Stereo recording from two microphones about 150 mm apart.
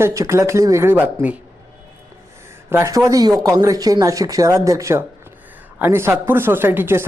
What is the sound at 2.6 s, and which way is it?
Speech, 20° right (ahead or behind).